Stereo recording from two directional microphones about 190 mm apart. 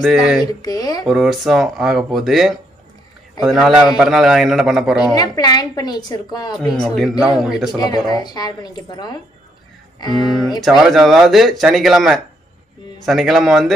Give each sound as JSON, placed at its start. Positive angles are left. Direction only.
{"t": 0.0, "sound": "speech", "side_deg": 0}
{"t": 0.5, "sound": "speech", "side_deg": 20}
{"t": 1.0, "sound": "speech", "side_deg": 0}
{"t": 5.1, "sound": "speech", "side_deg": 20}
{"t": 6.5, "sound": "speech", "side_deg": 0}
{"t": 8.2, "sound": "speech", "side_deg": 20}
{"t": 10.2, "sound": "speech", "side_deg": 0}